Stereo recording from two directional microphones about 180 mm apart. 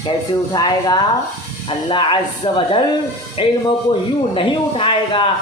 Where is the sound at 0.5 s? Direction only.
25° left (ahead or behind).